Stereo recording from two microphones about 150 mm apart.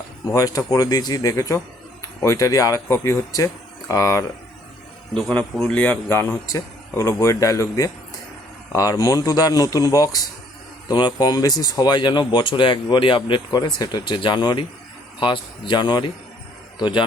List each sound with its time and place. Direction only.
0.3 s speech: 25° left (ahead or behind)
5.1 s speech: 5° left (ahead or behind); by 17.0 s 30° left (ahead or behind)